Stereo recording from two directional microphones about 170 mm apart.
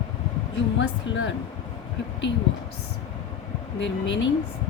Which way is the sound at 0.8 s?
90° left.